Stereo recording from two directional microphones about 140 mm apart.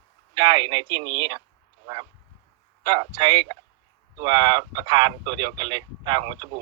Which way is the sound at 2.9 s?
35° right (ahead or behind).